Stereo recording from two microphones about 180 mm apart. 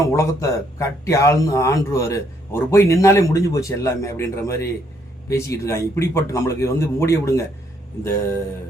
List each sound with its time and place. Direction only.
0.0 s speech: 15° left (ahead or behind)